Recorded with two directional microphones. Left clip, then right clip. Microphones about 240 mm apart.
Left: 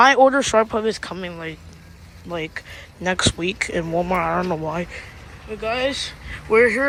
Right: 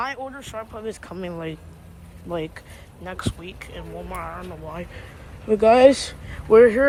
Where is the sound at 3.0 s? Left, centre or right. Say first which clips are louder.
Left 12 dB; centre.